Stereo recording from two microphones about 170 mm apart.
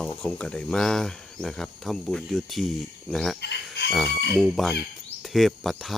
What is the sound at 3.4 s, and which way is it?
Chicken, 80° left.